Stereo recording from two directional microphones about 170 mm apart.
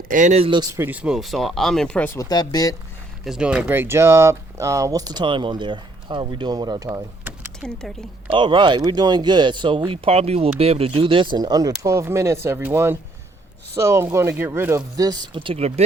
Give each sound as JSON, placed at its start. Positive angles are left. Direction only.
{"t": 0.1, "sound": "speech", "side_deg": -45}
{"t": 0.8, "sound": "speech", "side_deg": -10}
{"t": 2.3, "sound": "speech", "side_deg": 25}
{"t": 3.2, "sound": "speech", "side_deg": -5}
{"t": 7.6, "sound": "speech", "side_deg": 0}
{"t": 8.3, "sound": "speech", "side_deg": -30}